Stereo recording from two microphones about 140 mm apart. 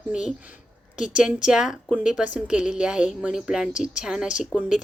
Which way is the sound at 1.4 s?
5° right (ahead or behind).